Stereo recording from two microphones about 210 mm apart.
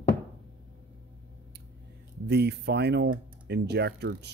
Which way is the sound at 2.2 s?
50° right (ahead or behind).